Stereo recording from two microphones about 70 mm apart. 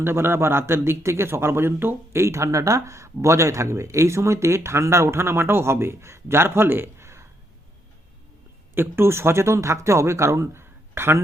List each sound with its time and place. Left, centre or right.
0.0 s a man's voice: right
8.7 s a man's voice: right